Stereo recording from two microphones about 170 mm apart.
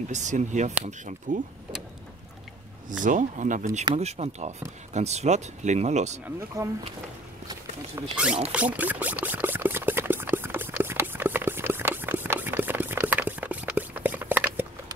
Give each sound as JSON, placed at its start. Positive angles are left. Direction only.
{"t": 0.1, "sound": "speech", "side_deg": -45}
{"t": 3.0, "sound": "speech", "side_deg": -50}
{"t": 6.2, "sound": "speech", "side_deg": -15}
{"t": 7.9, "sound": "speech", "side_deg": -5}
{"t": 8.5, "sound": "pour", "side_deg": -10}